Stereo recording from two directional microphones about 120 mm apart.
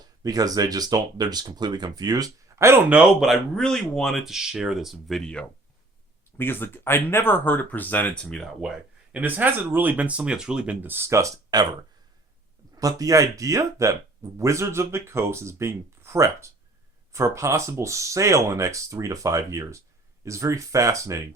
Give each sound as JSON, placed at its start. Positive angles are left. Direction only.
{"t": 0.0, "sound": "speech", "side_deg": -30}
{"t": 2.9, "sound": "speech", "side_deg": -5}
{"t": 6.3, "sound": "speech", "side_deg": 20}
{"t": 8.6, "sound": "speech", "side_deg": -5}
{"t": 12.7, "sound": "speech", "side_deg": -30}